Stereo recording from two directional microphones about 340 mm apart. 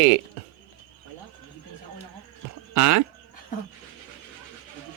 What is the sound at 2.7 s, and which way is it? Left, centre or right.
Speech, right.